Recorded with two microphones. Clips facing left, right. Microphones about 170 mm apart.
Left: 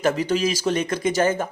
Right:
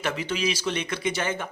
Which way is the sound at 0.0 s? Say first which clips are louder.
Left 7 dB; 40° left (ahead or behind).